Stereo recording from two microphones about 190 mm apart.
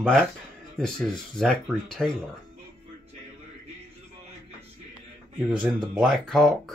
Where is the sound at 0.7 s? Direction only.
5° left (ahead or behind).